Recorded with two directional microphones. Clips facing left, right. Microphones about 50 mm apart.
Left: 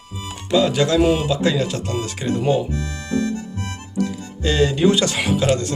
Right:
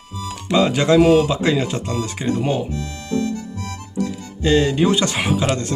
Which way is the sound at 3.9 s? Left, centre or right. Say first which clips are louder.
Left 1 dB; right.